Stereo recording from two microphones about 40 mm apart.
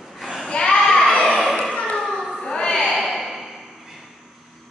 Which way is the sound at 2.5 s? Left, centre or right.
Left.